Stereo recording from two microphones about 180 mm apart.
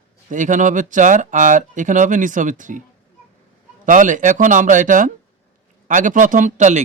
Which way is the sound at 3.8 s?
45° right (ahead or behind).